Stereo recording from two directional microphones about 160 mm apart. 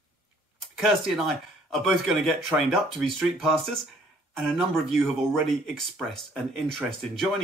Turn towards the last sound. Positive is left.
turn(degrees=0)  # may be behind; listen again after turning